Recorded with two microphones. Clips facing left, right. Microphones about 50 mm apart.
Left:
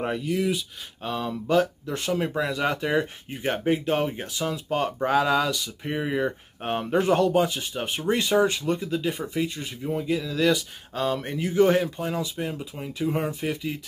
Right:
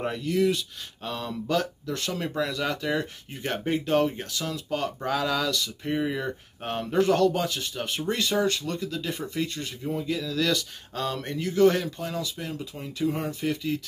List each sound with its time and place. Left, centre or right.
0.0 s speech: centre